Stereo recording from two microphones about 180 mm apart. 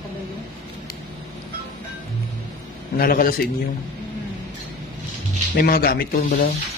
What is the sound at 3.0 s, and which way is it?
Speech, 50° left (ahead or behind).